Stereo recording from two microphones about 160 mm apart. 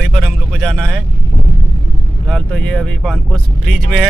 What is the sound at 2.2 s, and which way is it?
Speech, 5° left (ahead or behind).